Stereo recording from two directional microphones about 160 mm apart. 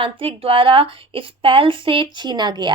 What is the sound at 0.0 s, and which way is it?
Speech, 35° right (ahead or behind).